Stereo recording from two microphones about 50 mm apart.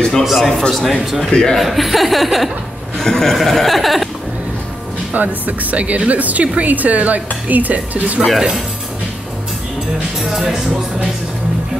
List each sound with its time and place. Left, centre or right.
0.2 s speech: centre
1.3 s a man's voice: centre
1.6 s a man's voice: centre
5.1 s speech: right
10.3 s speech: centre